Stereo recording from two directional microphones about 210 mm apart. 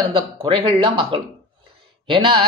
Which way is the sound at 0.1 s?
25° right (ahead or behind).